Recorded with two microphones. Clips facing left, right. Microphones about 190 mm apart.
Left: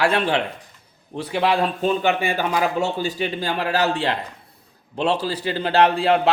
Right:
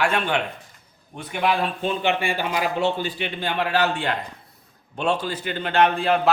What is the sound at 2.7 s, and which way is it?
A man's voice, 40° left (ahead or behind).